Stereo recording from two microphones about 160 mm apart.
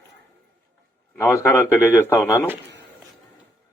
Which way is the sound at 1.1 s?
20° left (ahead or behind).